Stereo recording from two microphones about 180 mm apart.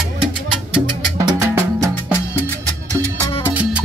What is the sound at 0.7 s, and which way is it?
Music, 20° right (ahead or behind).